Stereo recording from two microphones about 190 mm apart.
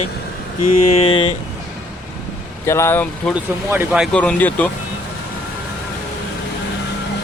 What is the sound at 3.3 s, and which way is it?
A man's voice, 5° right (ahead or behind).